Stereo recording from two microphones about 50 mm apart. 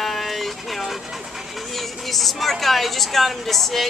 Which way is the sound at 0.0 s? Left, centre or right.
Centre.